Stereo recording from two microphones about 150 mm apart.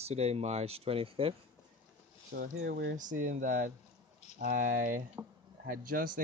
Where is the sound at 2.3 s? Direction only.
65° right (ahead or behind).